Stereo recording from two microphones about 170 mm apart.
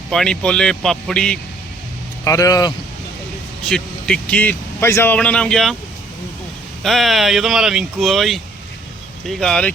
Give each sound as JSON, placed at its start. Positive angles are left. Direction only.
{"t": 0.1, "sound": "speech", "side_deg": 5}
{"t": 2.2, "sound": "speech", "side_deg": 20}
{"t": 3.7, "sound": "speech", "side_deg": 5}
{"t": 6.8, "sound": "speech", "side_deg": 0}